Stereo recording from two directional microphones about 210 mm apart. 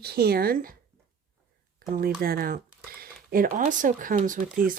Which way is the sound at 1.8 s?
45° right (ahead or behind).